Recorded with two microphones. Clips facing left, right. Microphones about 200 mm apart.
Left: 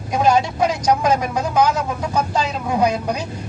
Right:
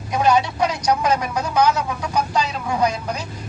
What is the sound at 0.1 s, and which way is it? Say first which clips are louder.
Speech: left 1 dB; 50° left (ahead or behind).